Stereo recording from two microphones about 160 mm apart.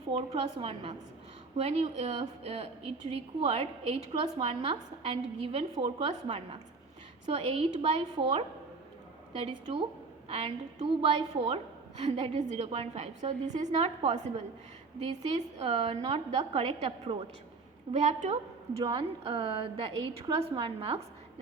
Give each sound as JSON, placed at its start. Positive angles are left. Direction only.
{"t": 0.1, "sound": "a woman's voice", "side_deg": -30}
{"t": 18.8, "sound": "a woman's voice", "side_deg": -30}